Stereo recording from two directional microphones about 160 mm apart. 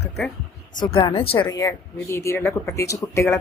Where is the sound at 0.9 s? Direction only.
35° left (ahead or behind).